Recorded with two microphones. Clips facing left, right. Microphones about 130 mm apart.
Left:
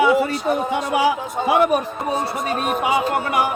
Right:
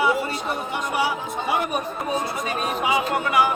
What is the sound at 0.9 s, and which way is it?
Speech, 90° left.